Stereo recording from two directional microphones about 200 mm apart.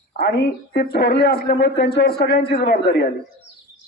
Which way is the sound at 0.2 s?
50° left (ahead or behind).